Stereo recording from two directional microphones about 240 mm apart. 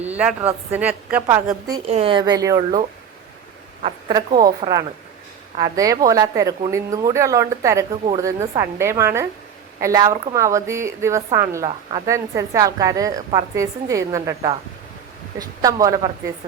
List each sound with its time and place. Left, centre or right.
0.0 s a woman's voice: centre
1.9 s a woman's voice: right
3.8 s a woman's voice: centre